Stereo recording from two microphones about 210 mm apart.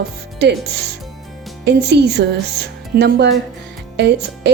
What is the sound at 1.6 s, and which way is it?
Speech, 50° right (ahead or behind).